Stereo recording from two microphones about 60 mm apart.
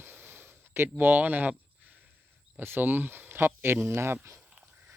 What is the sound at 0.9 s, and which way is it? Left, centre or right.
Speech, right.